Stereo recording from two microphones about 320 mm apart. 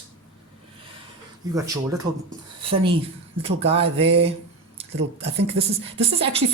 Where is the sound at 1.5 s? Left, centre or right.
Centre.